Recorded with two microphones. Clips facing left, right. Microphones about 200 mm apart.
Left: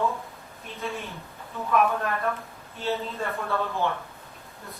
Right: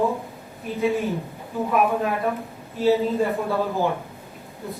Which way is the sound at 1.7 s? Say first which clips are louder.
Right 2 dB; 10° right (ahead or behind).